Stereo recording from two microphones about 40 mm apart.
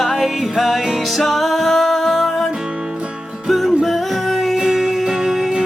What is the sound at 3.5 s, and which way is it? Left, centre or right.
Music, centre.